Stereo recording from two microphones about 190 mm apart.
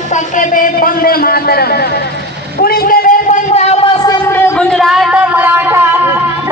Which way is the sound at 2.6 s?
55° left (ahead or behind).